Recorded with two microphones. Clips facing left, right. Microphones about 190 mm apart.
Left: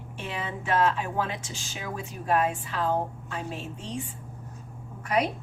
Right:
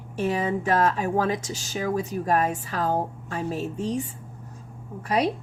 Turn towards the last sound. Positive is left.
turn(degrees=-30)  # may be behind; listen again after turning